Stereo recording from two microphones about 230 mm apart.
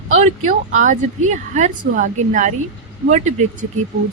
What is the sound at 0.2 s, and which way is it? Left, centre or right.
Speech, right.